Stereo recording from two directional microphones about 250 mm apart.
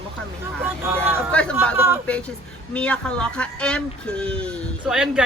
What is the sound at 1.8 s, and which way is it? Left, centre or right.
Speech, centre.